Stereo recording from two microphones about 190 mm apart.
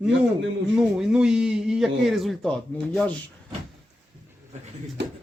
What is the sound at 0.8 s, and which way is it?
Speech, 5° right (ahead or behind).